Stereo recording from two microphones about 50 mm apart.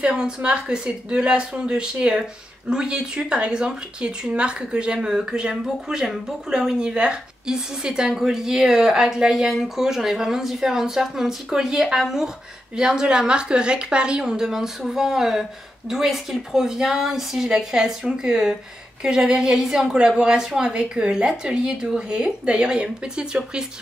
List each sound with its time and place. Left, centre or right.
0.0 s a woman's voice: centre